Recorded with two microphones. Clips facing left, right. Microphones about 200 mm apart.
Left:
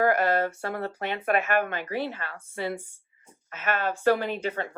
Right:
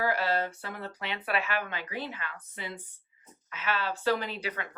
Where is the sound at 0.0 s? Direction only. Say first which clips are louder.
Left 6 dB; 50° left (ahead or behind).